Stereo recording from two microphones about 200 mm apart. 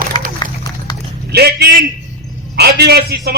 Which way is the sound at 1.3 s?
55° right (ahead or behind).